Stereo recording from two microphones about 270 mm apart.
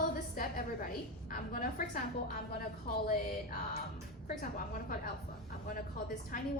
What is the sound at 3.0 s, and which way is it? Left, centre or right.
Speech, left.